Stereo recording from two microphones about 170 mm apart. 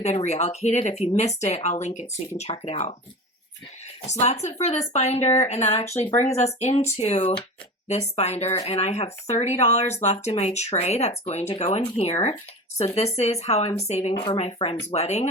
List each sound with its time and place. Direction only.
0.3 s speech: 40° left (ahead or behind)
4.0 s speech: 40° left (ahead or behind)